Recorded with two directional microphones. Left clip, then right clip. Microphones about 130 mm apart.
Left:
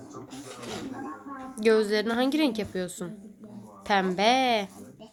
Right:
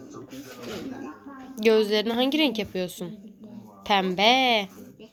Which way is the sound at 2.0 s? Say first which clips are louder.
Right 2 dB; centre (ahead or behind).